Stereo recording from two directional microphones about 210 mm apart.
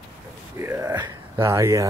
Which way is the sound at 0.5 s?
15° right (ahead or behind).